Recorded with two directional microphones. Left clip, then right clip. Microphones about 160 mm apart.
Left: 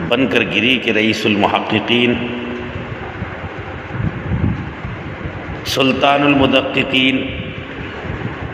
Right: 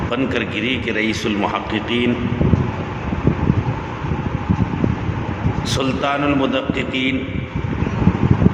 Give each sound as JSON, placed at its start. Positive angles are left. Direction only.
{"t": 0.1, "sound": "a man's voice", "side_deg": 20}
{"t": 5.7, "sound": "a man's voice", "side_deg": 20}